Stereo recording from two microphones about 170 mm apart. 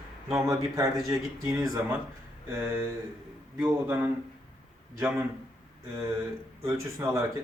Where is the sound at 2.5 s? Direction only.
15° right (ahead or behind).